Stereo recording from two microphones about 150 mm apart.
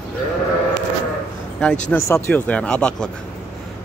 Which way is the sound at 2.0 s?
20° left (ahead or behind).